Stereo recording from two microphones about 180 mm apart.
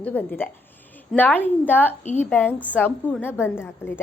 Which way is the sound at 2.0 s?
40° left (ahead or behind).